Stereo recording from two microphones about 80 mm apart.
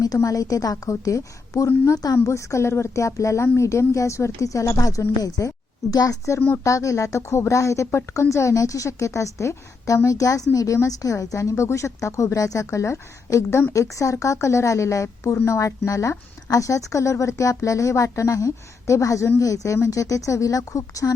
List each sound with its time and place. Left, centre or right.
0.0 s a woman's voice: left